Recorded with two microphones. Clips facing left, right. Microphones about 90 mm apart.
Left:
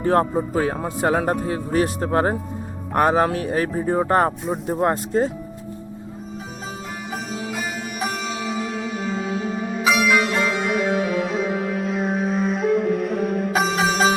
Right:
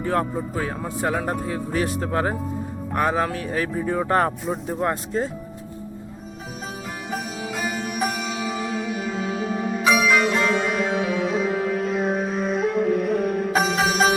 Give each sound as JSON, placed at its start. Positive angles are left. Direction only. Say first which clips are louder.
{"t": 0.0, "sound": "speech", "louder": "left 5 dB", "side_deg": 40}
{"t": 2.9, "sound": "speech", "louder": "left 5 dB", "side_deg": 50}
{"t": 3.8, "sound": "speech", "louder": "left 2 dB", "side_deg": 35}
{"t": 7.1, "sound": "music", "louder": "even", "side_deg": 0}